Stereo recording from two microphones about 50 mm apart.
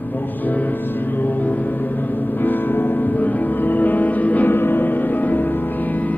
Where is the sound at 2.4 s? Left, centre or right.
Left.